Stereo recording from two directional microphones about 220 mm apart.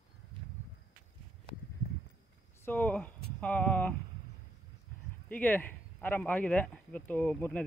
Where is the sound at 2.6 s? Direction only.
10° left (ahead or behind).